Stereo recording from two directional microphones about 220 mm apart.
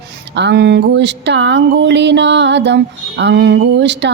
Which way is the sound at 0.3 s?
50° right (ahead or behind).